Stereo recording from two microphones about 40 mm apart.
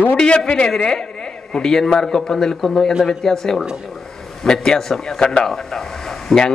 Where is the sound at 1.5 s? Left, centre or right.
Centre.